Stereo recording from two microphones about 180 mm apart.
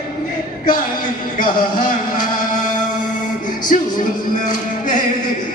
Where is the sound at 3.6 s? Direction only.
50° left (ahead or behind).